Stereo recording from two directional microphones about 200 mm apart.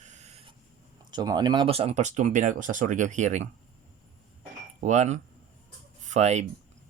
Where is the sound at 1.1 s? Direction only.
20° right (ahead or behind); by 3.5 s 35° right (ahead or behind).